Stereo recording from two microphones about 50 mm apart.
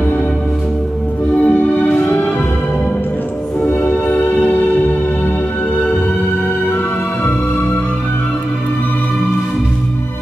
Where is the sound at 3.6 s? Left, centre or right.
Left.